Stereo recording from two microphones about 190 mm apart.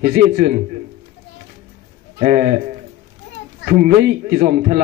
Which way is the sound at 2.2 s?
45° right (ahead or behind).